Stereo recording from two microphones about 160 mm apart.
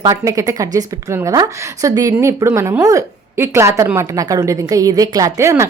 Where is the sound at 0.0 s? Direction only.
20° right (ahead or behind).